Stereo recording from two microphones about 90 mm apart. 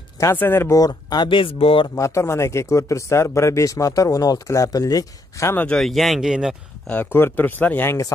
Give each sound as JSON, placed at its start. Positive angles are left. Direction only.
{"t": 0.4, "sound": "speech", "side_deg": 25}
{"t": 0.7, "sound": "speech", "side_deg": 45}
{"t": 1.3, "sound": "speech", "side_deg": 85}
{"t": 2.0, "sound": "speech", "side_deg": 35}
{"t": 5.7, "sound": "speech", "side_deg": 5}
{"t": 6.9, "sound": "speech", "side_deg": 20}